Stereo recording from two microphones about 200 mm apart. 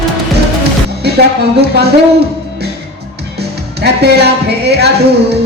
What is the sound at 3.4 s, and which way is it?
Music, 55° right (ahead or behind).